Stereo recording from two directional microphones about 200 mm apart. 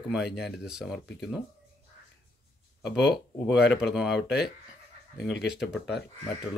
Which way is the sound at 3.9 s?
Centre (ahead or behind).